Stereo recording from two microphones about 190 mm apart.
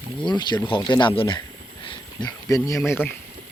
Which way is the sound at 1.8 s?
20° left (ahead or behind).